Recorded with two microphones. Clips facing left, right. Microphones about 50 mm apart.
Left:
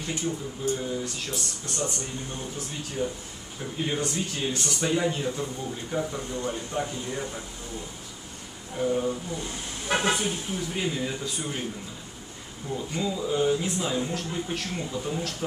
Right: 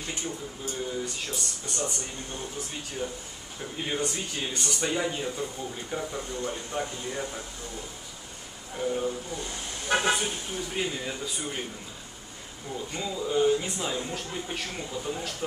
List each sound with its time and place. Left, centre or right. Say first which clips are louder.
0.7 s speech: left 1 dB; centre
8.7 s speech: left 3 dB; centre
12.7 s speech: left 3 dB; centre